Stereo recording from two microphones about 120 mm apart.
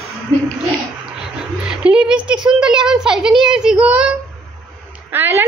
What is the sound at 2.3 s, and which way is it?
A child's voice, 5° right (ahead or behind).